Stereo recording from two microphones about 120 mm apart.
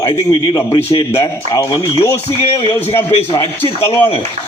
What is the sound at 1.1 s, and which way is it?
Speech, 25° left (ahead or behind).